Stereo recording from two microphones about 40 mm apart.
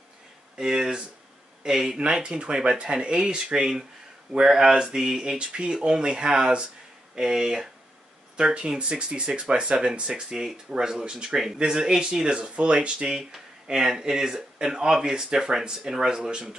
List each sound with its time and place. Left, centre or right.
0.6 s speech: centre
11.2 s speech: centre
11.5 s speech: centre
13.2 s speech: centre